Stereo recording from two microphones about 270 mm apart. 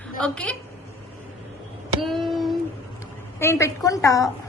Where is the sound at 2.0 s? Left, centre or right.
Centre.